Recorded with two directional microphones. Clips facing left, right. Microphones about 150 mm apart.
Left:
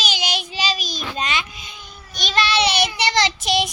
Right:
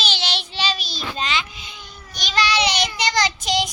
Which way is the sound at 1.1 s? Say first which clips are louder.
Even; 15° left (ahead or behind).